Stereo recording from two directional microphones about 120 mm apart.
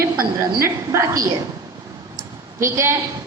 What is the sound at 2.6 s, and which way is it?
Speech, 25° right (ahead or behind).